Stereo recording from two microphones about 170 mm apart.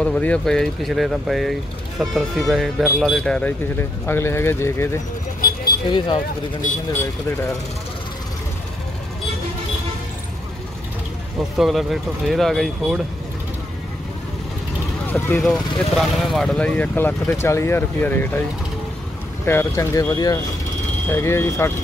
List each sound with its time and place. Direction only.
0.0 s speech: 5° left (ahead or behind)
5.9 s speech: 25° left (ahead or behind)
11.5 s speech: centre (ahead or behind)
15.0 s speech: 10° left (ahead or behind)
15.4 s speech: centre (ahead or behind)
19.4 s speech: 15° left (ahead or behind)